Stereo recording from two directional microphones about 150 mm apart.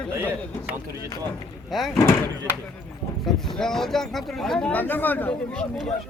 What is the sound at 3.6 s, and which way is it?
Speech, 5° left (ahead or behind).